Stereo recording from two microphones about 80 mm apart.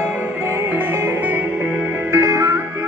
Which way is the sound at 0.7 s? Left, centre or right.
Right.